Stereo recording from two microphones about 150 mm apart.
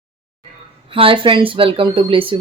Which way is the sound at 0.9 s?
35° right (ahead or behind).